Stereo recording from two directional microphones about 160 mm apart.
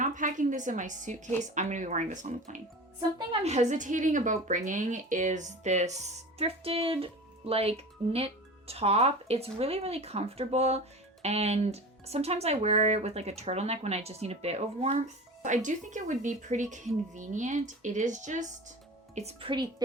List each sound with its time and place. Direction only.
0.0 s a woman's voice: 55° right (ahead or behind); by 19.7 s 30° right (ahead or behind)